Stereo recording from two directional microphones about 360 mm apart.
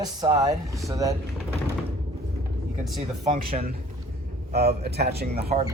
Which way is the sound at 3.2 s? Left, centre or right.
Centre.